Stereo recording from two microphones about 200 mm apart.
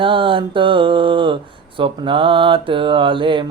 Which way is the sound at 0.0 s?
25° right (ahead or behind).